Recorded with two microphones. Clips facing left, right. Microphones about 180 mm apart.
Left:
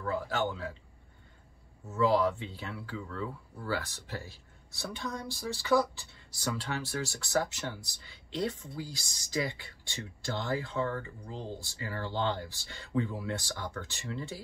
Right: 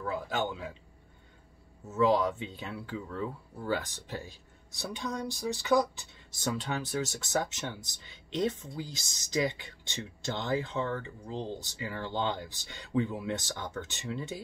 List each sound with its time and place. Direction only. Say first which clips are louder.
0.0 s speech: left 1 dB; 15° right (ahead or behind)
2.0 s speech: right 1 dB; 20° right (ahead or behind)